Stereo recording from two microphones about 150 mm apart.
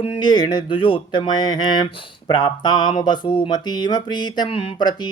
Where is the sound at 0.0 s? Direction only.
35° left (ahead or behind).